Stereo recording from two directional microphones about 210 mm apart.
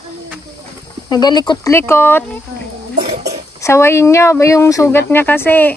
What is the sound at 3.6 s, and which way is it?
Speech, 15° left (ahead or behind).